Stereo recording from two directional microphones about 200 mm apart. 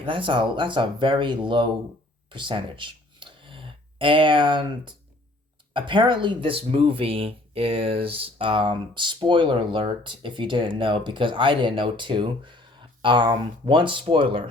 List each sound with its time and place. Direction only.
0.0 s speech: 25° right (ahead or behind)